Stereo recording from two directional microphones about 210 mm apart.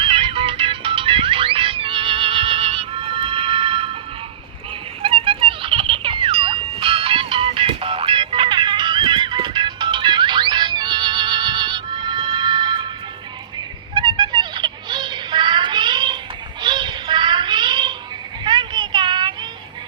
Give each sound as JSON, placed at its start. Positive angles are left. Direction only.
{"t": 0.0, "sound": "music", "side_deg": -25}
{"t": 5.0, "sound": "music", "side_deg": -25}
{"t": 13.9, "sound": "a sound", "side_deg": -20}
{"t": 16.6, "sound": "child singing", "side_deg": -20}